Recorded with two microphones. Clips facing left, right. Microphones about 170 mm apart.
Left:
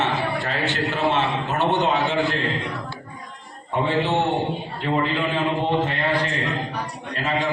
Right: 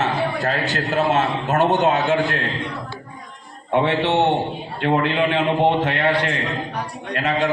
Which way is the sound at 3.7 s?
70° right (ahead or behind).